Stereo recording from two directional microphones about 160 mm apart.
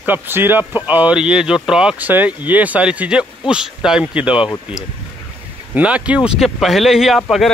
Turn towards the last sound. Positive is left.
turn(degrees=0)  # may be behind; listen again after turning